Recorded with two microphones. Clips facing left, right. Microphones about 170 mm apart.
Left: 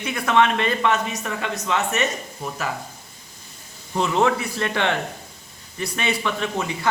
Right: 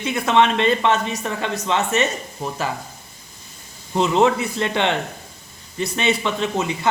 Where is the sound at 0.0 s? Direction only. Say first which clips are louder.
Right 2 dB; 25° right (ahead or behind).